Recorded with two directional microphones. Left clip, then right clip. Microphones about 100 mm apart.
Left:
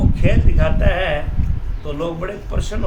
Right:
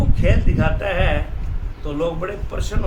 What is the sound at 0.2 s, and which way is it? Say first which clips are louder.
Speech: right 1 dB; 10° right (ahead or behind).